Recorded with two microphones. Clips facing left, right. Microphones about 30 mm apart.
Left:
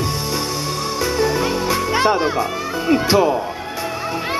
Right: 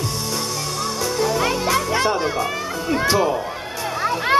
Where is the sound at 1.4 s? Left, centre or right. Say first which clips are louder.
Left 1 dB; centre.